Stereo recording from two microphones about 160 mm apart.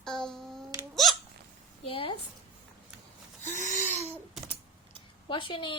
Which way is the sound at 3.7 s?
45° left (ahead or behind).